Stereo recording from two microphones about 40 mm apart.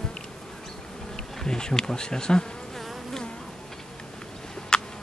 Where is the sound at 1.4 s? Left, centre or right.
Centre.